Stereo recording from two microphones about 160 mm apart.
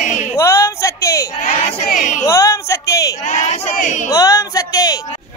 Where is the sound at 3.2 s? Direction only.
45° left (ahead or behind).